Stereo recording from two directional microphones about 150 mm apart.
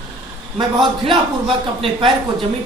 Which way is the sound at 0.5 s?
30° right (ahead or behind).